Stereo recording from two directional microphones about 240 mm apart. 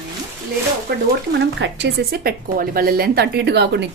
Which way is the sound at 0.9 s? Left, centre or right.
Right.